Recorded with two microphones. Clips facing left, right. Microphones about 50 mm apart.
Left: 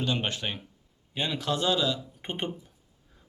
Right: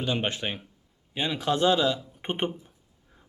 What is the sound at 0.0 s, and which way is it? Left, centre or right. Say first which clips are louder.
Speech: right 1 dB; centre.